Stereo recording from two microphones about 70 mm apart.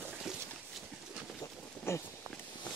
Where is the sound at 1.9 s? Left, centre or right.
Left.